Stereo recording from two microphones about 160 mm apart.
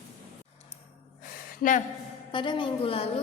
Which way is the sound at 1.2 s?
55° left (ahead or behind).